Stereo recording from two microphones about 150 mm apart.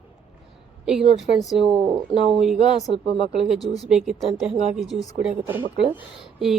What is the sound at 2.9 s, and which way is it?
Speech, 40° right (ahead or behind).